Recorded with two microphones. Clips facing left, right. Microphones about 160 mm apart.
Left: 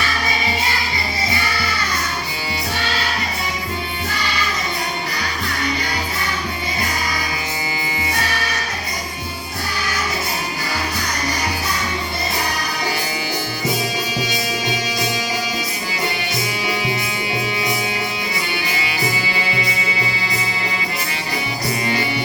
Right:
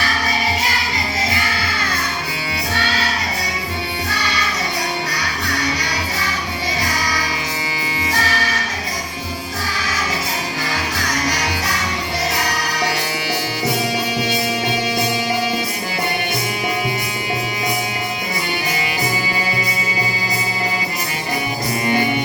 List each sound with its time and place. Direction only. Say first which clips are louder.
5.5 s music: even; 90° right
11.3 s music: right 1 dB; 90° right